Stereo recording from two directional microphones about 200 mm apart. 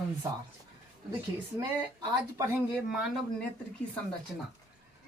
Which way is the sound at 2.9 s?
Centre (ahead or behind).